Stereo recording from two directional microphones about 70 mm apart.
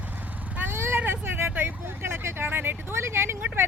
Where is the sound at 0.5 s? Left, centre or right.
Right.